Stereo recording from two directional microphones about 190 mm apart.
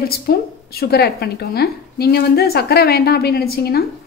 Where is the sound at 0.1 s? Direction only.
55° left (ahead or behind).